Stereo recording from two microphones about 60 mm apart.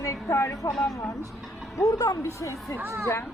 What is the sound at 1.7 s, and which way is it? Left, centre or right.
Speech, left.